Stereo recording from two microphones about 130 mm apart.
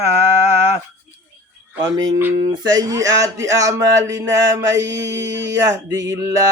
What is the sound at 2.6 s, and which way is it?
Speech, 25° right (ahead or behind).